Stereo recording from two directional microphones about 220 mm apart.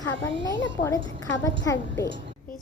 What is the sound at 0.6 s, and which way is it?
A woman's voice, 15° left (ahead or behind).